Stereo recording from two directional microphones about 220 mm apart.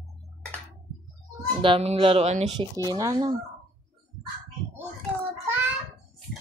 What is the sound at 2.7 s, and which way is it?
Speech, 15° right (ahead or behind).